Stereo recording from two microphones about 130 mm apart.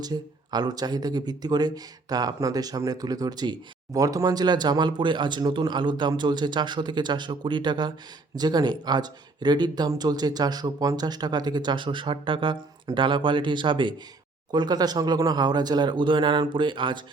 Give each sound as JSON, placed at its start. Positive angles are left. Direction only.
{"t": 0.0, "sound": "speech", "side_deg": -35}